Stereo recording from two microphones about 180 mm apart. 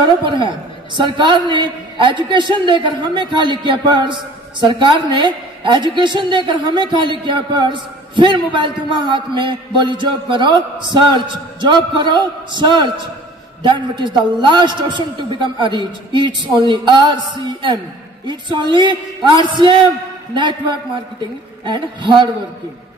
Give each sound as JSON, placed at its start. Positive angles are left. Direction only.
{"t": 0.2, "sound": "a man's voice", "side_deg": -25}
{"t": 21.6, "sound": "a man's voice", "side_deg": -25}